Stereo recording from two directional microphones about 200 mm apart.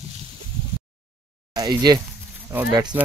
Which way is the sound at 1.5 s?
20° right (ahead or behind).